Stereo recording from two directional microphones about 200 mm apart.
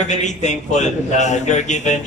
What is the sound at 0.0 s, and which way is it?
A woman's voice, 35° left (ahead or behind).